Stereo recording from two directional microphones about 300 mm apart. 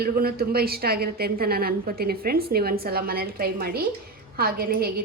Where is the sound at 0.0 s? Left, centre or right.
Right.